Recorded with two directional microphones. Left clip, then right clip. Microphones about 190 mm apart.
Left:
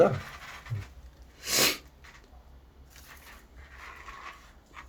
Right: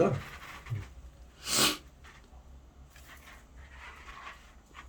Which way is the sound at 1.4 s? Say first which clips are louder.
Left 2 dB; 5° right (ahead or behind).